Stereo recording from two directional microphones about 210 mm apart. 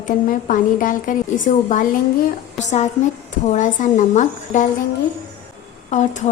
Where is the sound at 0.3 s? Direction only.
40° left (ahead or behind).